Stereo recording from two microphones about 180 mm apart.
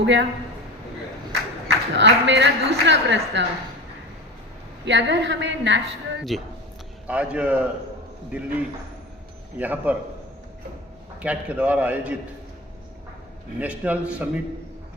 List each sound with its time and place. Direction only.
0.0 s a woman's voice: 80° right
1.6 s a man's voice: 75° right (ahead or behind)
4.9 s a woman's voice: 80° right
6.3 s a man's voice: centre (ahead or behind)
11.2 s a man's voice: 5° right (ahead or behind)
13.6 s a man's voice: 10° right (ahead or behind)